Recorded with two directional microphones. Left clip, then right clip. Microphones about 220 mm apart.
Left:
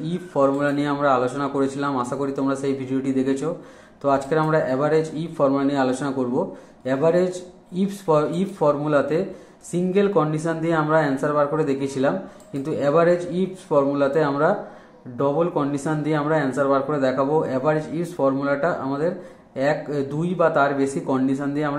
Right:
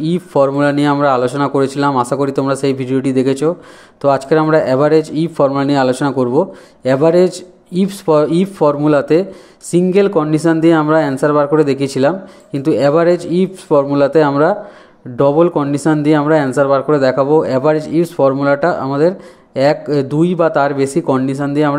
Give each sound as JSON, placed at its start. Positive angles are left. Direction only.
{"t": 0.0, "sound": "speech", "side_deg": -45}